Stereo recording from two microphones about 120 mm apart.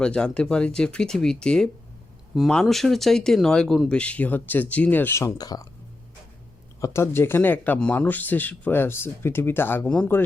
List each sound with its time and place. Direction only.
0.0 s speech: 10° left (ahead or behind); by 5.6 s 30° left (ahead or behind)
6.7 s speech: 25° left (ahead or behind)